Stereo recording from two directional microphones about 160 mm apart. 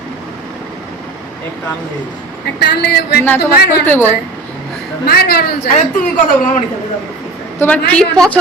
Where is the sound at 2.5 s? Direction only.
90° left.